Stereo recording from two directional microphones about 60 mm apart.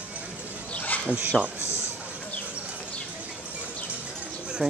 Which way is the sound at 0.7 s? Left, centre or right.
Left.